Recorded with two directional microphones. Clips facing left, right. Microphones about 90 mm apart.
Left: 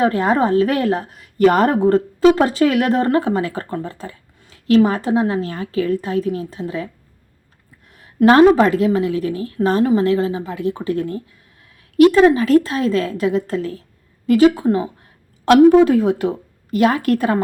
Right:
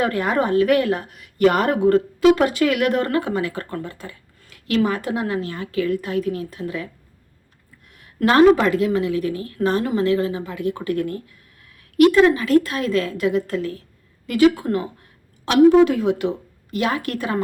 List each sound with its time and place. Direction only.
0.0 s a woman's voice: 30° left (ahead or behind)
7.9 s a woman's voice: 30° left (ahead or behind)
15.4 s a woman's voice: 40° left (ahead or behind)